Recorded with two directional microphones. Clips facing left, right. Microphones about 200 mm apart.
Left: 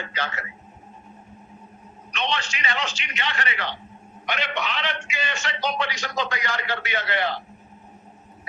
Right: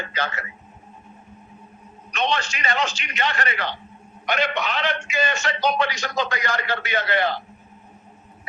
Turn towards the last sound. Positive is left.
turn(degrees=-45)  # may be behind; listen again after turning